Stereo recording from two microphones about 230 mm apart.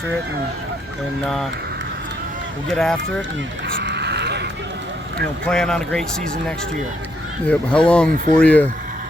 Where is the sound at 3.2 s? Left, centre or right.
Right.